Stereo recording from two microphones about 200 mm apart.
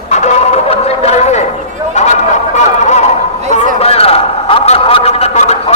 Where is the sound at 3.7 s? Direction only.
30° left (ahead or behind).